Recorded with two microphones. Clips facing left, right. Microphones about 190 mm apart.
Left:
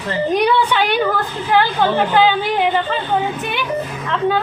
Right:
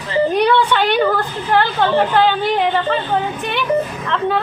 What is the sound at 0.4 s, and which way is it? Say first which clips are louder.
A woman's voice: right 1 dB; 5° left (ahead or behind).